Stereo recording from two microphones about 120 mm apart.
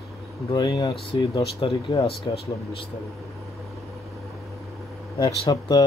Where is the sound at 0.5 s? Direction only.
30° left (ahead or behind).